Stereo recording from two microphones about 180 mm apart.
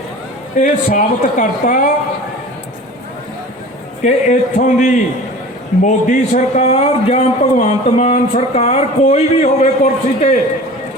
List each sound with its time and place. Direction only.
0.6 s speech: 45° left (ahead or behind)
4.0 s a man's voice: 40° left (ahead or behind)